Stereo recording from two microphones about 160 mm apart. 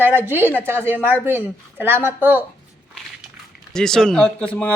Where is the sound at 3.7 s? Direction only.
5° left (ahead or behind).